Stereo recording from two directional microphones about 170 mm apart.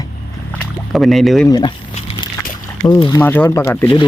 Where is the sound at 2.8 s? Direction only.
25° left (ahead or behind).